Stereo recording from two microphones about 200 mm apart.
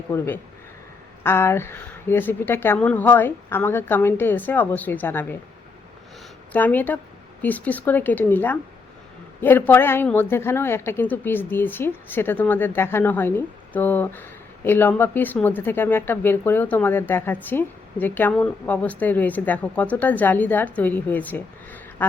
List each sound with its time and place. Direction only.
0.1 s a woman's voice: 10° left (ahead or behind)
6.5 s a woman's voice: 10° left (ahead or behind)